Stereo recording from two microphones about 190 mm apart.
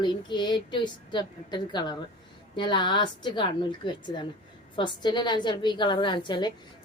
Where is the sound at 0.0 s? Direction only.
25° left (ahead or behind).